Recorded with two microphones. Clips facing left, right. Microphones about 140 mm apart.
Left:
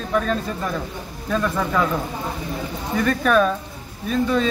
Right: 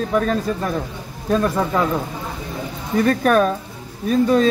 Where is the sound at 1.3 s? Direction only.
30° right (ahead or behind).